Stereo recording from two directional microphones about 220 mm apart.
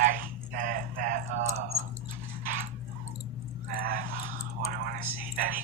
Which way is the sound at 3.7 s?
40° right (ahead or behind).